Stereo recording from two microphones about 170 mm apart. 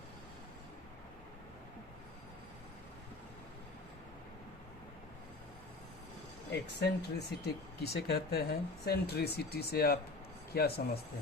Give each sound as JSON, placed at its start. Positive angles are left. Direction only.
{"t": 6.7, "sound": "speech", "side_deg": 75}